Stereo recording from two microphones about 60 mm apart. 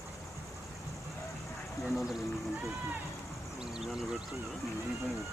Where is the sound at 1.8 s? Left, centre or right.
Left.